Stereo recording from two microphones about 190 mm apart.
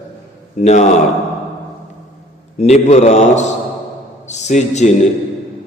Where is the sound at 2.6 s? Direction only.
35° left (ahead or behind).